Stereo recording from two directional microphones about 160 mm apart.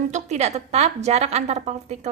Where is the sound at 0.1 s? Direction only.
45° right (ahead or behind).